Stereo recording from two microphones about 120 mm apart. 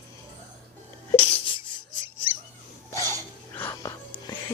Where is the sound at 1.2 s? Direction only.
50° left (ahead or behind).